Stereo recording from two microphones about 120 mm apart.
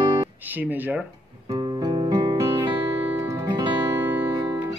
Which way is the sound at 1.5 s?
35° right (ahead or behind).